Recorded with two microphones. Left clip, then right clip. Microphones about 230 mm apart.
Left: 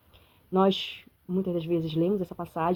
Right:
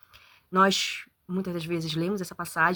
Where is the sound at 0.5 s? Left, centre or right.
Right.